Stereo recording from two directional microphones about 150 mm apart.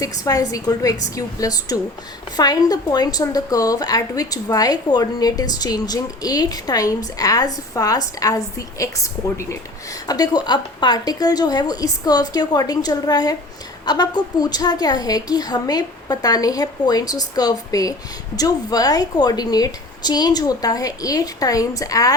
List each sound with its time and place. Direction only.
0.0 s a woman's voice: 25° left (ahead or behind)